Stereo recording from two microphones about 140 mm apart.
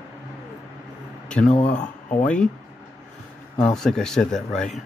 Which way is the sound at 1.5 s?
60° left (ahead or behind).